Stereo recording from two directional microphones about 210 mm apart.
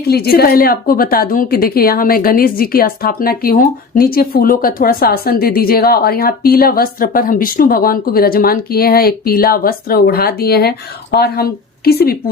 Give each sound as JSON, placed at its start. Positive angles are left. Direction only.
{"t": 0.1, "sound": "a woman's voice", "side_deg": 50}